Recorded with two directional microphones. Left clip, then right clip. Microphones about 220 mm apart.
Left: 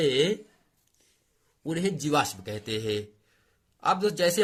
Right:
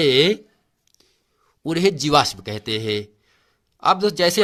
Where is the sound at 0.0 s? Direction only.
45° right (ahead or behind).